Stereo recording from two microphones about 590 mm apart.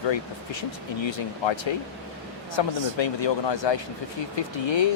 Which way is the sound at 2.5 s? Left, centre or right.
Left.